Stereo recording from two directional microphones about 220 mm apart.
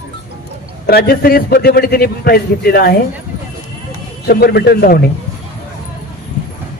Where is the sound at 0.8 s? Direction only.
45° left (ahead or behind).